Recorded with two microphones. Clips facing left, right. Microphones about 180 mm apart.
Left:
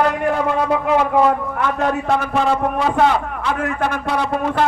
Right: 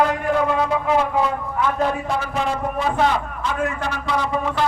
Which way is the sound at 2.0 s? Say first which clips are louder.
Left 5 dB; 65° left (ahead or behind).